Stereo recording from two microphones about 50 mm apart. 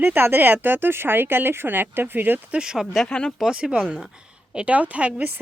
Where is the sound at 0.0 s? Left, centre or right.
Right.